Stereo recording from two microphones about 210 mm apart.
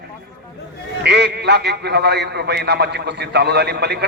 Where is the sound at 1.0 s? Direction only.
50° right (ahead or behind).